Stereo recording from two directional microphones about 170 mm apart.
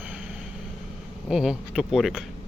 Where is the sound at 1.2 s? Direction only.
Centre (ahead or behind).